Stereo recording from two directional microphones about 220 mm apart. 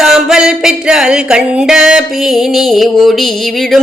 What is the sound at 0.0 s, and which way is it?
Music, centre (ahead or behind).